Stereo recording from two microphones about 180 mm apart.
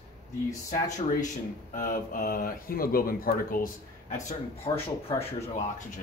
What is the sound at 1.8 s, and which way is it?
Speech, 50° left (ahead or behind).